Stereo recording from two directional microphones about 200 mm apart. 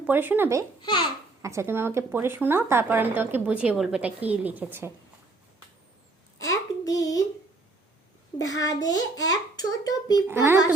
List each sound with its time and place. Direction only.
0.0 s a woman's voice: 10° right (ahead or behind)
0.8 s a child's voice: 25° left (ahead or behind)
1.4 s a woman's voice: 15° right (ahead or behind)
6.4 s a sound: 15° left (ahead or behind)
8.4 s a child's voice: 15° left (ahead or behind)
10.2 s a woman's voice: 10° right (ahead or behind)